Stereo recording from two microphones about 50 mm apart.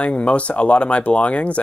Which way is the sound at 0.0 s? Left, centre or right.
Left.